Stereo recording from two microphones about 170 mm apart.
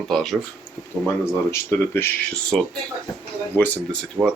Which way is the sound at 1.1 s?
15° left (ahead or behind).